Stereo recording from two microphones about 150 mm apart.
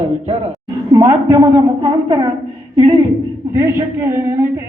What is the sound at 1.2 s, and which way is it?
Speech, 25° right (ahead or behind).